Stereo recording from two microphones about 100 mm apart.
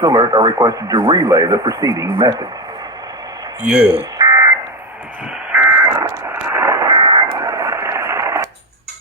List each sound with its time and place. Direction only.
0.0 s speech: 45° right (ahead or behind)
0.9 s speech: 50° right (ahead or behind); by 2.0 s 35° right (ahead or behind)
3.6 s speech: 10° right (ahead or behind)
4.2 s fire alarm: 40° right (ahead or behind)
5.5 s buzzer: 20° right (ahead or behind)
6.8 s radio: 50° right (ahead or behind)
7.3 s radio: 35° right (ahead or behind)